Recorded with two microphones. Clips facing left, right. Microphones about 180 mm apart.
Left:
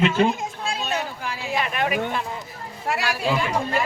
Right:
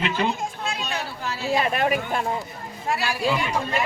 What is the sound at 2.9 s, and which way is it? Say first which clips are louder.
Speech: even; 80° left.